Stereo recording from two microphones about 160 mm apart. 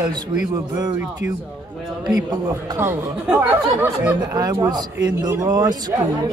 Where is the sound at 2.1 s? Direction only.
25° right (ahead or behind).